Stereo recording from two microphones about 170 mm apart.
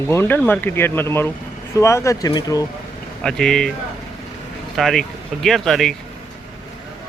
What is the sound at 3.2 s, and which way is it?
Speech, 5° left (ahead or behind).